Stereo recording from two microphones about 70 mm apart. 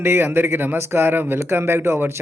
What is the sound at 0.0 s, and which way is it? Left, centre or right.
Speech, right.